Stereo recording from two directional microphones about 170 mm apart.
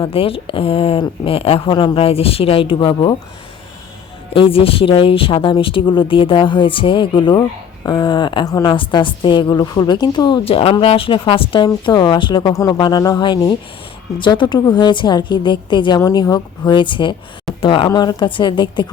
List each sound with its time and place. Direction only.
0.0 s speech: 35° left (ahead or behind)
4.4 s a woman's voice: 30° left (ahead or behind)